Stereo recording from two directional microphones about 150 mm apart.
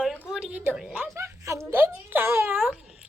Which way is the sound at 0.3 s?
5° right (ahead or behind).